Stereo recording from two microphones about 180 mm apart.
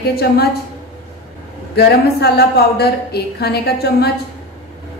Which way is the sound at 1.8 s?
65° left (ahead or behind).